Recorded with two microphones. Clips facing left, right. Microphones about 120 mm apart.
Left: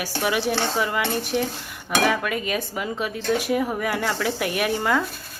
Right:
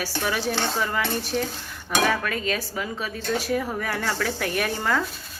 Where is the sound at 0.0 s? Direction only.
15° left (ahead or behind).